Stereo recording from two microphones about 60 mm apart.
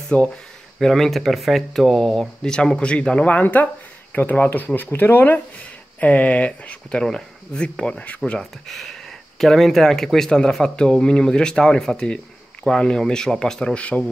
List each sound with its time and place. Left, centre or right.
0.1 s speech: centre
0.7 s speech: centre
9.4 s speech: centre
13.7 s speech: left